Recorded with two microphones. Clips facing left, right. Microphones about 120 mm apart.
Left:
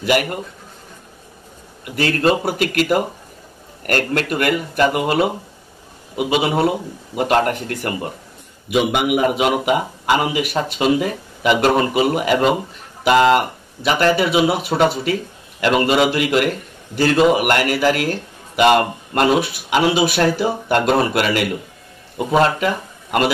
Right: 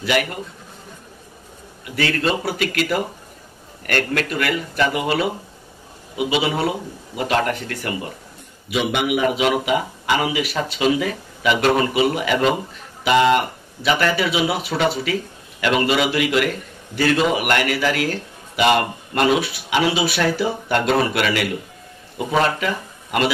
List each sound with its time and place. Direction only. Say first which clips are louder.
0.0 s a man's voice: left 3 dB; 45° left (ahead or behind)
1.9 s a man's voice: left 4 dB; 45° left (ahead or behind)